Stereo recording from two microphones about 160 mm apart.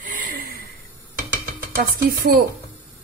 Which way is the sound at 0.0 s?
55° right (ahead or behind).